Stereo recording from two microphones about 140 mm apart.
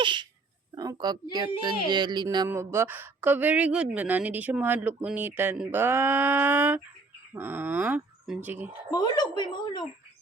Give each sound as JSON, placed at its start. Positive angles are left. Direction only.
{"t": 0.0, "sound": "a child's voice", "side_deg": -35}
{"t": 2.5, "sound": "a woman's voice", "side_deg": -15}
{"t": 8.9, "sound": "speech", "side_deg": 30}